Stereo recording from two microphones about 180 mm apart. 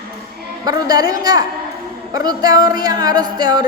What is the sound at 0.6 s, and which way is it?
Music, 20° right (ahead or behind).